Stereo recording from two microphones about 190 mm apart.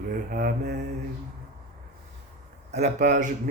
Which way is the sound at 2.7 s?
40° right (ahead or behind).